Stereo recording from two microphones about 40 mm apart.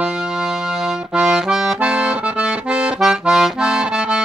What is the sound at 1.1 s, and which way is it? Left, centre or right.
Accordion, centre.